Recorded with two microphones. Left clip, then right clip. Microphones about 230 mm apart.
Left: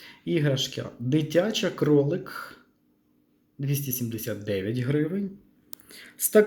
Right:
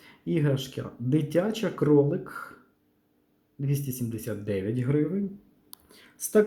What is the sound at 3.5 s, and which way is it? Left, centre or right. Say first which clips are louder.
Speech: left 1 dB; centre.